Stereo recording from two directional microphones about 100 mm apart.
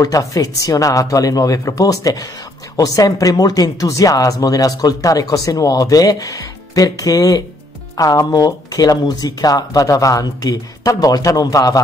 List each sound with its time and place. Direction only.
0.0 s speech: 35° left (ahead or behind)